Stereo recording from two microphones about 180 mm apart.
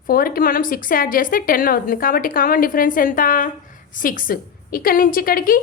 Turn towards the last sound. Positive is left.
turn(degrees=55)  # may be behind; listen again after turning